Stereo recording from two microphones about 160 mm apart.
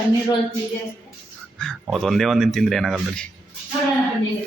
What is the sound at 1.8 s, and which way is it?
Speech, centre (ahead or behind).